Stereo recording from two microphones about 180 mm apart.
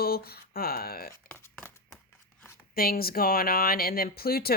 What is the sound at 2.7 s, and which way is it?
Speech, 55° left (ahead or behind).